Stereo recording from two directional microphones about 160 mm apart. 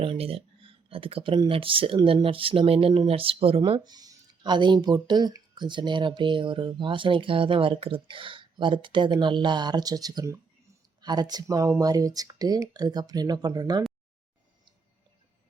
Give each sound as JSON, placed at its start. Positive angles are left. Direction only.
{"t": 0.0, "sound": "speech", "side_deg": -35}